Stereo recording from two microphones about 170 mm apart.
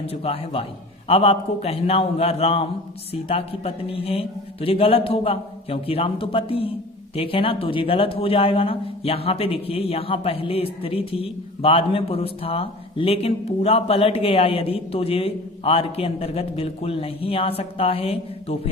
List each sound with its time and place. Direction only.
0.1 s speech: 35° left (ahead or behind)